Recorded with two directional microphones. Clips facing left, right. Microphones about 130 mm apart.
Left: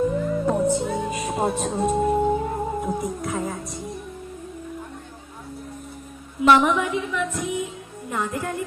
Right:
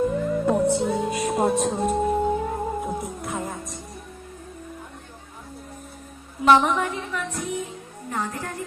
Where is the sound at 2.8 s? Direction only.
Centre (ahead or behind).